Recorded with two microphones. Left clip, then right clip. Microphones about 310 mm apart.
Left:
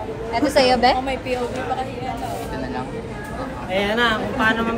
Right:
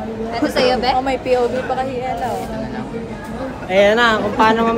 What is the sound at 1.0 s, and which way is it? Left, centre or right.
Speech, right.